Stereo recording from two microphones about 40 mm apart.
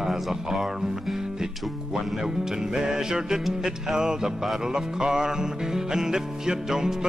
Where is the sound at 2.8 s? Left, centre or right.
Centre.